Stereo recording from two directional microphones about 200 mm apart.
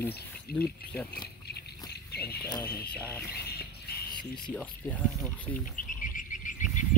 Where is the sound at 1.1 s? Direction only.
55° left (ahead or behind).